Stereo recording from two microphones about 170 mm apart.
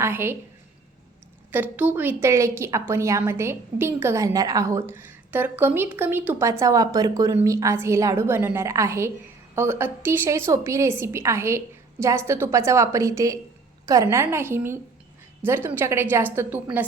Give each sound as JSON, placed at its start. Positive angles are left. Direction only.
{"t": 0.0, "sound": "a woman's voice", "side_deg": -15}
{"t": 1.5, "sound": "a woman's voice", "side_deg": -10}